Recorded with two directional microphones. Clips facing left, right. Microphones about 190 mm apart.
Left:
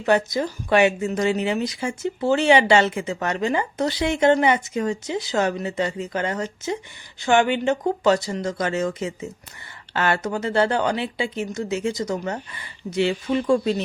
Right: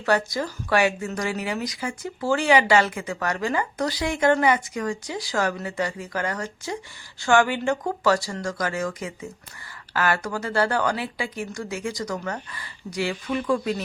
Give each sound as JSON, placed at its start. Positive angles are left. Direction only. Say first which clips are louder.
{"t": 0.0, "sound": "speech", "louder": "left 3 dB", "side_deg": 20}